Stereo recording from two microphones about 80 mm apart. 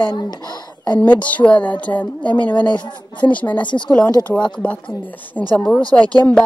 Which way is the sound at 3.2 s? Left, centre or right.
Left.